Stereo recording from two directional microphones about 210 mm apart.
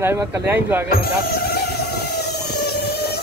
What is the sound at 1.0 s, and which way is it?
Vehicle, 50° left (ahead or behind).